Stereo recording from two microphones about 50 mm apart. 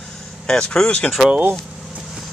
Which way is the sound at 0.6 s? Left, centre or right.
Centre.